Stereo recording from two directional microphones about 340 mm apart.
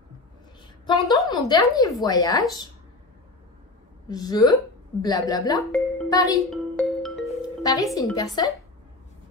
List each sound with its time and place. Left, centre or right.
1.3 s speech: centre
4.1 s speech: centre
5.6 s music: centre
7.6 s speech: centre